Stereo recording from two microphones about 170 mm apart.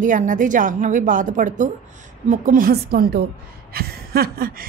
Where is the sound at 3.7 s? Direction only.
65° right (ahead or behind).